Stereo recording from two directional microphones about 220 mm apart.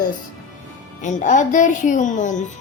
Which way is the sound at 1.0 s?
35° left (ahead or behind).